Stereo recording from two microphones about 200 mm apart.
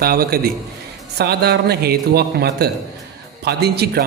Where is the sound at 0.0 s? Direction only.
50° right (ahead or behind).